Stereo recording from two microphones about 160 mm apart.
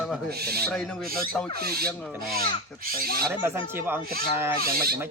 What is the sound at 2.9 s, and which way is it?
Speech, 70° right (ahead or behind).